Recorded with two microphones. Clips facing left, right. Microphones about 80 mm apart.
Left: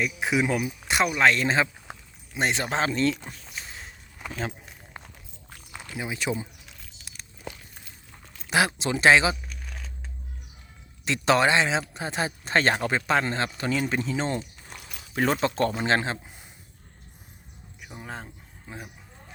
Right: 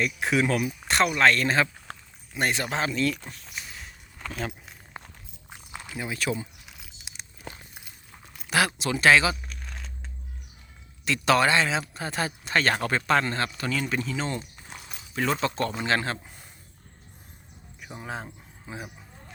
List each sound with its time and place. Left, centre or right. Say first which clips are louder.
0.0 s speech: even; centre
3.6 s walk: left 1 dB; left
4.2 s a sound: even; centre
5.5 s a sound: right 2 dB; centre
5.9 s speech: even; centre
6.7 s a sound: right 1 dB; centre
7.9 s keys jangling: even; centre
8.4 s a man's voice: left 1 dB; left
9.3 s a sound: even; centre
11.0 s a man's voice: even; left
14.8 s dog: even; right
15.1 s a man's voice: left 2 dB; left; by 16.5 s centre
17.7 s speech: right 3 dB; centre